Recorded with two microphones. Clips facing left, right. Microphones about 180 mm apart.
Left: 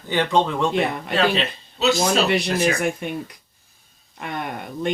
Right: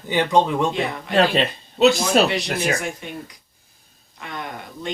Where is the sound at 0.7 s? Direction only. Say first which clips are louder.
Left 2 dB; 55° left (ahead or behind).